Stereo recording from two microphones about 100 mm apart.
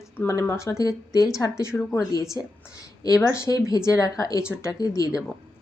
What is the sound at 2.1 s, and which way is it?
Speech, 40° left (ahead or behind).